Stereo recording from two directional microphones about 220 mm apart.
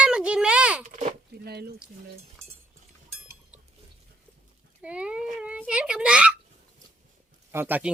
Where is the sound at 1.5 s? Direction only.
45° right (ahead or behind).